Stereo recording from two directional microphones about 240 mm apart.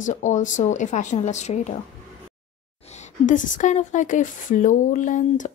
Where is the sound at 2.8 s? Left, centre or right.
Left.